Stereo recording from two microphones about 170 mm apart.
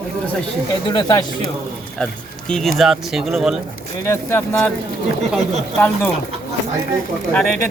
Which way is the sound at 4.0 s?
15° left (ahead or behind).